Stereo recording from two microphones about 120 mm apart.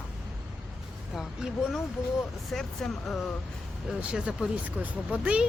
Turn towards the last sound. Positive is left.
turn(degrees=-10)  # may be behind; listen again after turning